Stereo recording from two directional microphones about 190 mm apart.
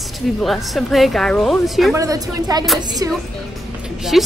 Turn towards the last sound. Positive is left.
turn(degrees=0)  # may be behind; listen again after turning